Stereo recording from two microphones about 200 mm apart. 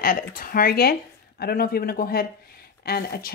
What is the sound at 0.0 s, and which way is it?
Speech, 45° left (ahead or behind).